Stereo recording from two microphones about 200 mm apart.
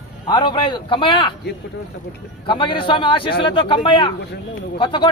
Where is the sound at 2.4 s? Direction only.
25° left (ahead or behind).